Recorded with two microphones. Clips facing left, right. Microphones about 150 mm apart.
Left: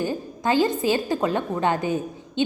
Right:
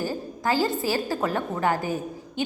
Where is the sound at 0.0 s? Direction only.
20° left (ahead or behind).